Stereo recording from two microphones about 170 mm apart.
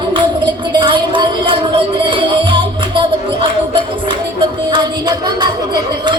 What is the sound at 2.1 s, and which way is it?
Music, 30° right (ahead or behind).